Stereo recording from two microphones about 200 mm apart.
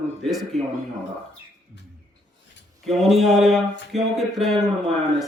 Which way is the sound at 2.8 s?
Centre (ahead or behind).